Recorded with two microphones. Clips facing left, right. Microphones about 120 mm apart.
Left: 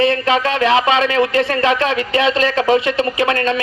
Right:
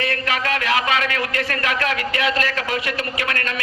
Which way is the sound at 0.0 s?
25° left (ahead or behind).